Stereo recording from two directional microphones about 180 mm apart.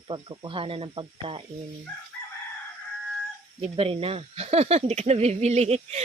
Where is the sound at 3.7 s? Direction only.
30° right (ahead or behind).